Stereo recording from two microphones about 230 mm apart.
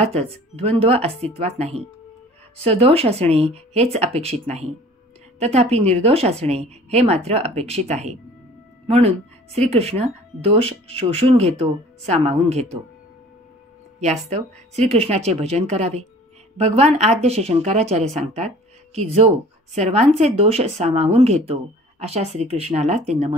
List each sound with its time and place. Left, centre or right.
0.0 s speech: right
14.3 s speech: right